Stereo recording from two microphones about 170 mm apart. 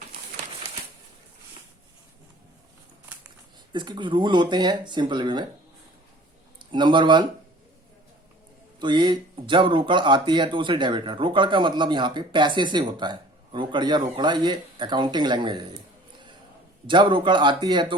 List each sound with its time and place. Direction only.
3.7 s speech: 25° right (ahead or behind)
6.6 s a man's voice: 30° right (ahead or behind)
8.8 s speech: 25° right (ahead or behind)
16.8 s speech: 30° right (ahead or behind)